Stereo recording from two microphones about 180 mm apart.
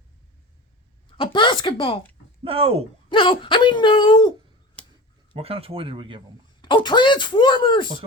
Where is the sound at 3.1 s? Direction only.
25° left (ahead or behind).